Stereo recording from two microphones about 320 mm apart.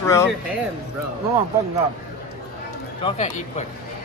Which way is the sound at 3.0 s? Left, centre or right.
Centre.